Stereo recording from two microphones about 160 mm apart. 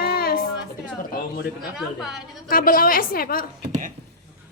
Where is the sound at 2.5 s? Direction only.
65° left (ahead or behind).